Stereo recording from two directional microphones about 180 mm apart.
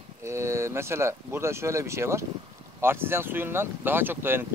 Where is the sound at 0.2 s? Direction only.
15° right (ahead or behind).